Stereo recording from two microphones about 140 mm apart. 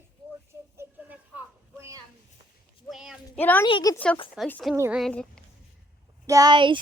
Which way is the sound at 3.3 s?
10° left (ahead or behind).